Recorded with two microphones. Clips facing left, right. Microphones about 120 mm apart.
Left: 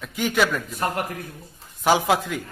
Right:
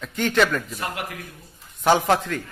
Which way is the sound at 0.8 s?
40° left (ahead or behind).